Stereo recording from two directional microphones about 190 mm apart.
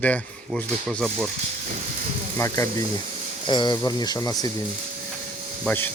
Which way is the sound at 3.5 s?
25° left (ahead or behind).